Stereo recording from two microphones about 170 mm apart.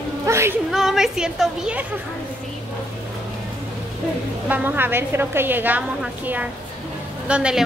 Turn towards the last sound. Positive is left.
turn(degrees=-5)  # may be behind; listen again after turning